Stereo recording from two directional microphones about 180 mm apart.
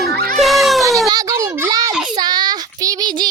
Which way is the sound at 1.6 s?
20° right (ahead or behind).